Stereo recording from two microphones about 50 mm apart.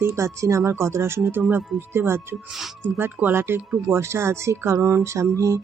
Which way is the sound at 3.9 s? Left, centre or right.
Right.